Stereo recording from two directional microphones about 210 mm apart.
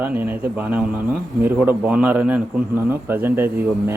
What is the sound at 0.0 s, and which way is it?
A man's voice, 10° right (ahead or behind).